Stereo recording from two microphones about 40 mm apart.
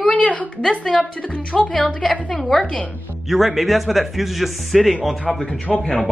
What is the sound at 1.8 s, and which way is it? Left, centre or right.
Speech, centre.